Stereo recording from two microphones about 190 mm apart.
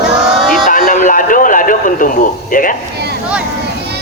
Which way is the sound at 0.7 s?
45° left (ahead or behind).